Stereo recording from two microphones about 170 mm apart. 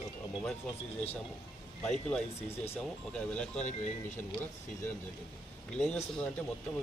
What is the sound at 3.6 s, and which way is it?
Speech, 45° left (ahead or behind).